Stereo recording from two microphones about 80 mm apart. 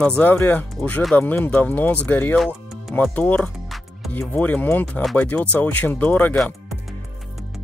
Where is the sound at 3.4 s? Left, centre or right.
Centre.